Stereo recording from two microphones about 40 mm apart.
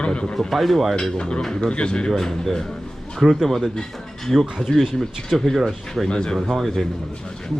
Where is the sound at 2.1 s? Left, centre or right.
Centre.